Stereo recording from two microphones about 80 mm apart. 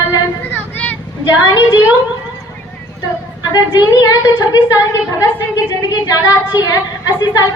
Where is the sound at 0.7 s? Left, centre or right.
Left.